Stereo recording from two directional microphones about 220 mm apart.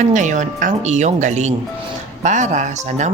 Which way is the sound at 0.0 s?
35° right (ahead or behind).